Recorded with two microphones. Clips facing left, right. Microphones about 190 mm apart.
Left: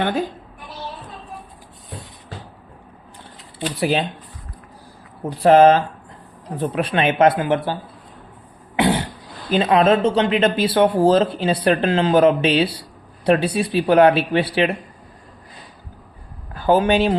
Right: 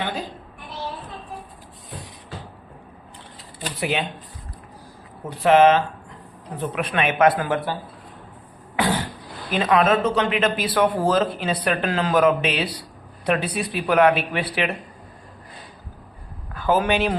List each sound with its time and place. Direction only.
3.8 s speech: 35° left (ahead or behind)
5.4 s speech: 35° left (ahead or behind)
8.7 s cough: 20° left (ahead or behind)
9.5 s speech: 30° left (ahead or behind)
16.6 s a man's voice: 30° left (ahead or behind)